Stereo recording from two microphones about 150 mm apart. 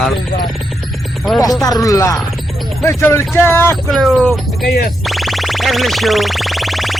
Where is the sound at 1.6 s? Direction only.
25° left (ahead or behind).